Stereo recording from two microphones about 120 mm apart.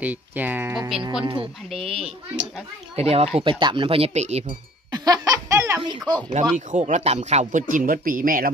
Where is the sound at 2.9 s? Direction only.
60° right (ahead or behind).